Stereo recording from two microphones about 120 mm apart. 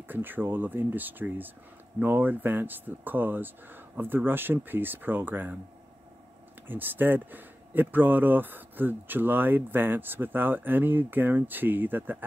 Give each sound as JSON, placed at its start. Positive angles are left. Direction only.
{"t": 0.1, "sound": "speech", "side_deg": -15}
{"t": 6.7, "sound": "speech", "side_deg": -15}